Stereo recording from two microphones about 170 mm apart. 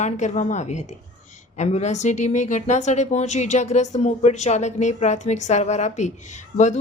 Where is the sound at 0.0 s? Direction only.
45° left (ahead or behind).